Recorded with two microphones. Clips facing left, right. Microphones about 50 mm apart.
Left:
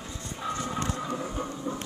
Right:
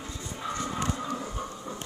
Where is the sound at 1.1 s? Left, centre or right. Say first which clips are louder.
Left 2 dB; centre.